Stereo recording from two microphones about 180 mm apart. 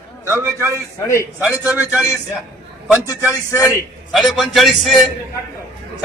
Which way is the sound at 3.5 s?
15° left (ahead or behind).